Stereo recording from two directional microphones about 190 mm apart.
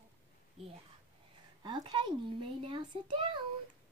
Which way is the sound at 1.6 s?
25° right (ahead or behind).